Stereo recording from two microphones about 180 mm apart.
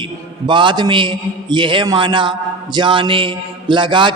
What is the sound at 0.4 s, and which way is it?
A man's voice, 25° right (ahead or behind).